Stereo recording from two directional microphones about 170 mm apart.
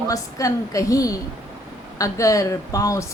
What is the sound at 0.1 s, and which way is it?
A woman's voice, 20° left (ahead or behind).